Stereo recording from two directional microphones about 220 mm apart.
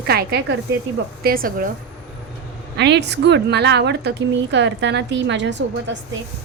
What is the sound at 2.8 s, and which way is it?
A woman's voice, 50° right (ahead or behind).